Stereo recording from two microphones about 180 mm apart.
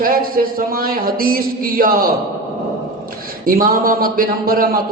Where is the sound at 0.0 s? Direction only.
55° right (ahead or behind).